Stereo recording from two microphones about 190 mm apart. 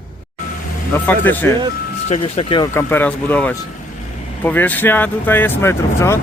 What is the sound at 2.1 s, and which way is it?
Speech, 35° left (ahead or behind).